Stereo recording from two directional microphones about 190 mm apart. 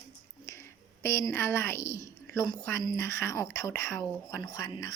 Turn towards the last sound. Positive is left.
turn(degrees=20)  # may be behind; listen again after turning